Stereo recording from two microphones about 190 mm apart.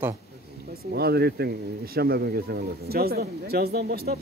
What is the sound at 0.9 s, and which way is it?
Speech, 60° right (ahead or behind).